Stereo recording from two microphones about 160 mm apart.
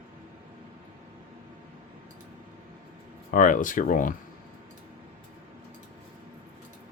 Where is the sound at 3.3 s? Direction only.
55° left (ahead or behind).